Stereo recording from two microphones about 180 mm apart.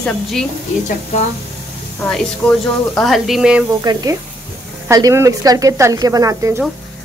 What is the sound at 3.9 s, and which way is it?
Speech, 25° right (ahead or behind).